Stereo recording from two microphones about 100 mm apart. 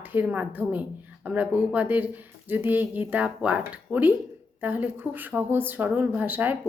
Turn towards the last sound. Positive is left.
turn(degrees=-20)  # may be behind; listen again after turning